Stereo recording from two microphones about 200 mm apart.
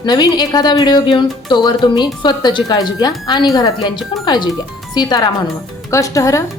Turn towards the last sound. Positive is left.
turn(degrees=15)  # may be behind; listen again after turning